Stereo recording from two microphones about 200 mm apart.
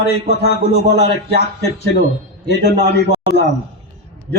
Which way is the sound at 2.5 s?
55° left (ahead or behind).